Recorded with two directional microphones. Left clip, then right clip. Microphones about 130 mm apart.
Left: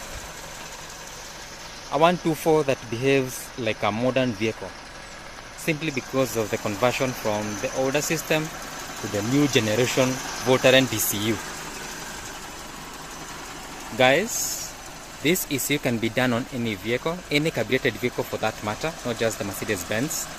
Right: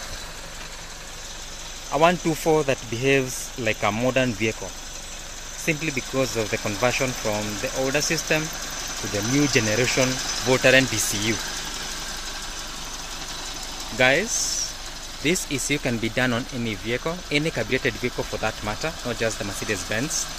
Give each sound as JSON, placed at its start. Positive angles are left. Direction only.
{"t": 1.9, "sound": "speech", "side_deg": 0}
{"t": 5.7, "sound": "speech", "side_deg": 5}
{"t": 13.9, "sound": "speech", "side_deg": 10}
{"t": 15.2, "sound": "speech", "side_deg": 10}